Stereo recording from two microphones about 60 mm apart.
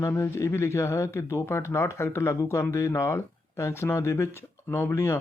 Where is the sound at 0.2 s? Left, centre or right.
Left.